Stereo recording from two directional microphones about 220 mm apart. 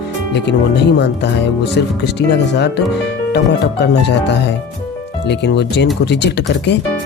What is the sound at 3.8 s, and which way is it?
Speech, 50° left (ahead or behind).